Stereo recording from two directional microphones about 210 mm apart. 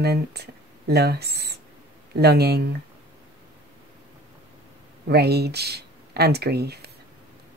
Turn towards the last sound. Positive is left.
turn(degrees=-50)  # may be behind; listen again after turning